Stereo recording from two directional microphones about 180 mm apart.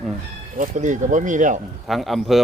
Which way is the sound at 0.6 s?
45° right (ahead or behind).